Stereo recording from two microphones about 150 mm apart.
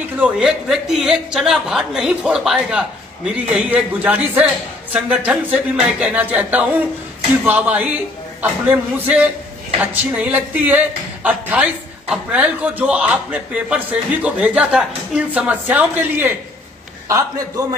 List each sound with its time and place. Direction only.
0.0 s a woman's voice: 5° right (ahead or behind)
17.1 s a man's voice: 25° right (ahead or behind)